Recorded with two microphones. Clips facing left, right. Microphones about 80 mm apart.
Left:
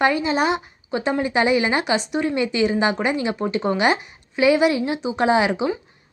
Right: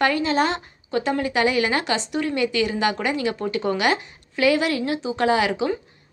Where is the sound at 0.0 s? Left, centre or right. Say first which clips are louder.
Left 1 dB; centre.